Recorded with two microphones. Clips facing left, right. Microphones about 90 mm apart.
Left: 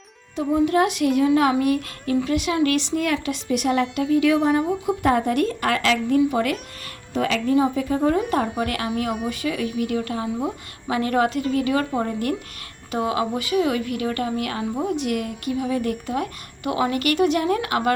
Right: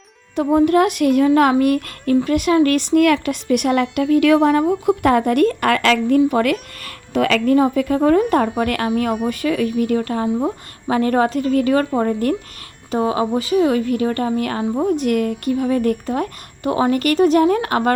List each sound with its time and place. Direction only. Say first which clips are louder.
0.3 s a woman's voice: right 5 dB; 55° right (ahead or behind)
12.9 s a woman's voice: right 5 dB; 30° right (ahead or behind)